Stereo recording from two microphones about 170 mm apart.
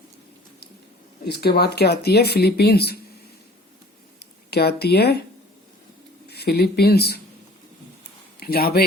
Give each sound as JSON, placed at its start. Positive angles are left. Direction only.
{"t": 1.2, "sound": "speech", "side_deg": 70}
{"t": 4.5, "sound": "speech", "side_deg": 70}
{"t": 6.2, "sound": "speech", "side_deg": 70}
{"t": 8.4, "sound": "speech", "side_deg": 65}